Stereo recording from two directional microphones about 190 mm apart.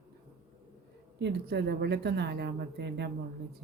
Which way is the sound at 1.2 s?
60° right (ahead or behind).